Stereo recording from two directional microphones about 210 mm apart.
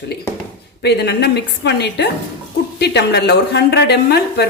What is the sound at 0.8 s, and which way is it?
A woman's voice, 50° left (ahead or behind).